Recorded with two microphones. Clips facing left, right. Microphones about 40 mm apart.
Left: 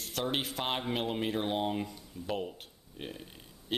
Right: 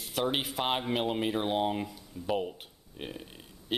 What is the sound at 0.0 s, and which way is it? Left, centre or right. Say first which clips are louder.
Speech: right 3 dB; centre.